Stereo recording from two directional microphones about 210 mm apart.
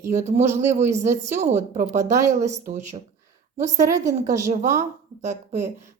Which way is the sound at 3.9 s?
15° right (ahead or behind).